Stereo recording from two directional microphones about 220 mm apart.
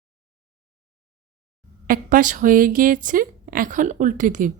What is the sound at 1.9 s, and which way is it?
A woman's voice, 35° right (ahead or behind).